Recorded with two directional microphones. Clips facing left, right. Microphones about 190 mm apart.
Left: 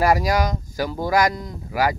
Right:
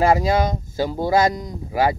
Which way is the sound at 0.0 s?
25° right (ahead or behind).